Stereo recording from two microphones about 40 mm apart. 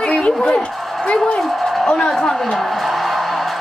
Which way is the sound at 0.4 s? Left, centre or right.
Left.